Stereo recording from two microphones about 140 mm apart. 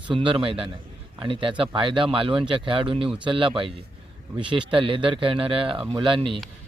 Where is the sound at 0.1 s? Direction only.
40° right (ahead or behind).